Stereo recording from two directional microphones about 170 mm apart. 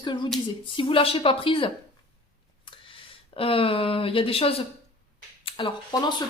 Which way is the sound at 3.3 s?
35° left (ahead or behind).